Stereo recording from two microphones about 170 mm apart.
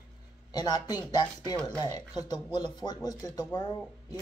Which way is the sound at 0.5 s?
25° left (ahead or behind).